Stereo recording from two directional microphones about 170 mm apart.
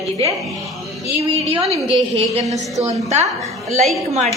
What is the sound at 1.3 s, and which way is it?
A woman's voice, 35° right (ahead or behind).